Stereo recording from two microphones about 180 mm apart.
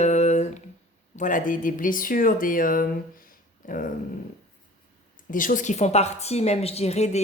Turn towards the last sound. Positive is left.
turn(degrees=35)  # may be behind; listen again after turning